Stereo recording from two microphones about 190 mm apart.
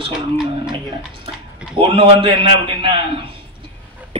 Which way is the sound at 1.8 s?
25° right (ahead or behind).